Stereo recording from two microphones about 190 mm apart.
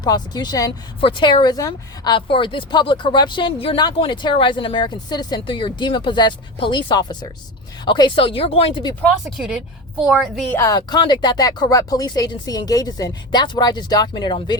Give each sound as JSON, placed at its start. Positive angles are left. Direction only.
{"t": 0.0, "sound": "speech", "side_deg": 20}
{"t": 9.2, "sound": "a woman's voice", "side_deg": 0}
{"t": 10.5, "sound": "speech", "side_deg": 15}